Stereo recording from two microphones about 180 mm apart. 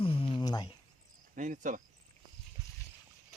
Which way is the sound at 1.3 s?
45° right (ahead or behind).